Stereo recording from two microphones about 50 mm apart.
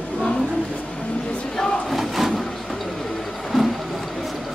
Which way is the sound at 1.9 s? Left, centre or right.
Centre.